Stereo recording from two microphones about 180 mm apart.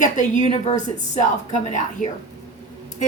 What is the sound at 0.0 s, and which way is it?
Speech, 45° left (ahead or behind).